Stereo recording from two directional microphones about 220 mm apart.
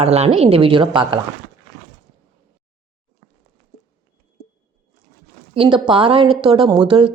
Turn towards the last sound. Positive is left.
turn(degrees=-20)  # may be behind; listen again after turning